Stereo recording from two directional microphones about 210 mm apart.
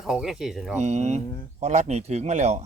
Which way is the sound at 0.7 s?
35° right (ahead or behind).